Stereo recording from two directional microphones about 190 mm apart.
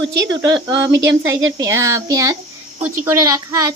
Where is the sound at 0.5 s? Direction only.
25° right (ahead or behind).